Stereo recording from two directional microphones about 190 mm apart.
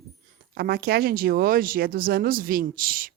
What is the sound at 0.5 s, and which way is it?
Speech, 55° right (ahead or behind).